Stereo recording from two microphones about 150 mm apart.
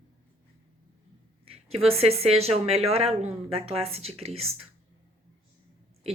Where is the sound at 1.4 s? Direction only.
40° right (ahead or behind).